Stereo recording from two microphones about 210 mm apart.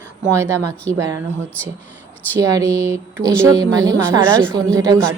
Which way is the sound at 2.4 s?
15° right (ahead or behind).